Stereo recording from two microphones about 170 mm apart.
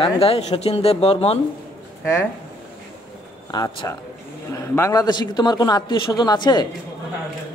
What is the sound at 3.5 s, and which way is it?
A man's voice, 25° left (ahead or behind).